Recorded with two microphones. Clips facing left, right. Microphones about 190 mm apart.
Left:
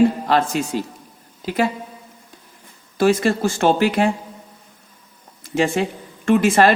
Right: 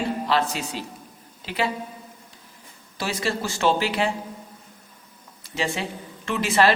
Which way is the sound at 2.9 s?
50° left (ahead or behind).